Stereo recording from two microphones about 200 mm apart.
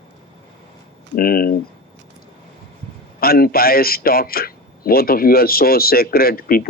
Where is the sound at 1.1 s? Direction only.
45° left (ahead or behind).